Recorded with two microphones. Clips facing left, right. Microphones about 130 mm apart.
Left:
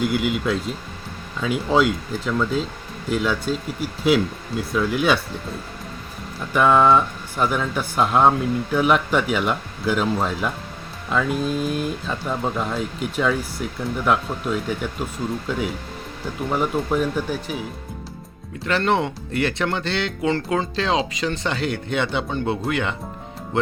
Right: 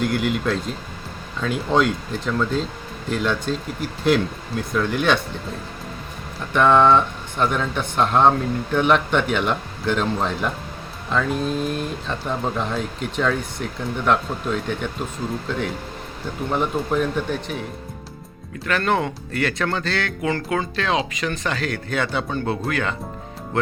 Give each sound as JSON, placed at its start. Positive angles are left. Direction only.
{"t": 0.0, "sound": "speech", "side_deg": 0}
{"t": 6.5, "sound": "speech", "side_deg": 5}
{"t": 18.6, "sound": "speech", "side_deg": 25}